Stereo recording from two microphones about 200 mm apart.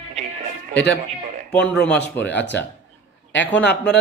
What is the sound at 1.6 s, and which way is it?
Speech, 5° left (ahead or behind).